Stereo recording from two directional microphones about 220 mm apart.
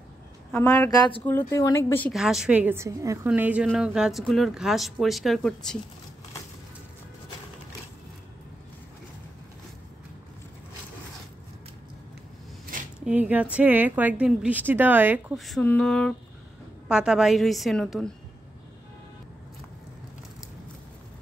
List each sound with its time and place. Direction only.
0.5 s a woman's voice: 10° left (ahead or behind)
2.1 s a woman's voice: 5° right (ahead or behind)
13.0 s a woman's voice: 5° right (ahead or behind)